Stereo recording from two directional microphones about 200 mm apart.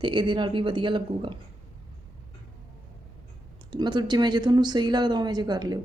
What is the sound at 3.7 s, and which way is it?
A woman's voice, 20° right (ahead or behind).